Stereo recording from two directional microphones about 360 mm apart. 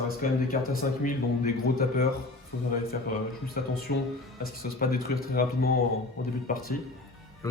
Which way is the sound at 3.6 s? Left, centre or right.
Left.